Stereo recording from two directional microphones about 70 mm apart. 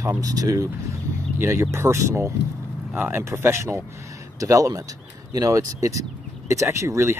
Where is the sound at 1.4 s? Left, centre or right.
Right.